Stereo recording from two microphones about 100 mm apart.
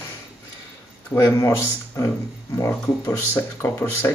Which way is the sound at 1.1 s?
25° left (ahead or behind).